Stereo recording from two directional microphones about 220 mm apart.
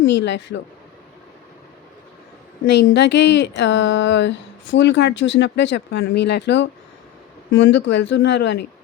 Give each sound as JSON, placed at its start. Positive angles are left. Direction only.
{"t": 0.1, "sound": "speech", "side_deg": 50}
{"t": 2.6, "sound": "speech", "side_deg": 50}